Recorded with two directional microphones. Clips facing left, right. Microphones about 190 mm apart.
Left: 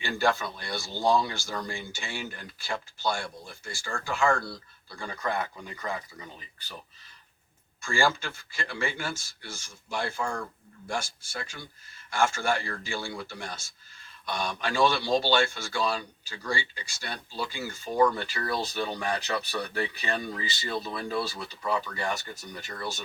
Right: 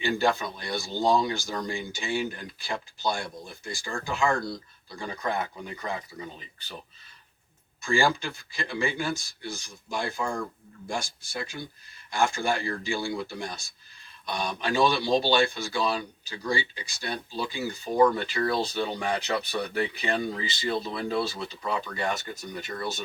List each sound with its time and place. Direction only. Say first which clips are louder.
0.0 s speech: right 2 dB; 20° right (ahead or behind)
7.8 s speech: right 2 dB; 15° right (ahead or behind)